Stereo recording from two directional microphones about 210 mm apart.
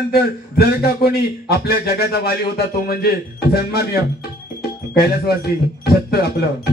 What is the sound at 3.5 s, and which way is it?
Speech, 50° left (ahead or behind).